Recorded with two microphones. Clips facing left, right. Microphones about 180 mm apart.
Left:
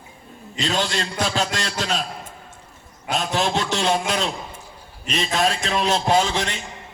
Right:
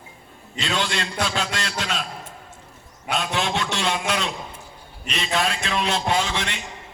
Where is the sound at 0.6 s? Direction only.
40° left (ahead or behind).